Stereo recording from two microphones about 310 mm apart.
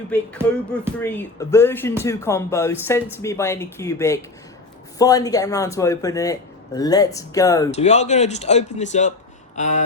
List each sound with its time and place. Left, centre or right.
0.1 s music: centre
0.9 s speech: centre; by 9.8 s left